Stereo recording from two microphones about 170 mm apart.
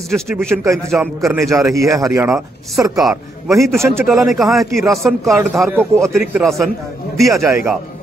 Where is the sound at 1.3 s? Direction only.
20° right (ahead or behind).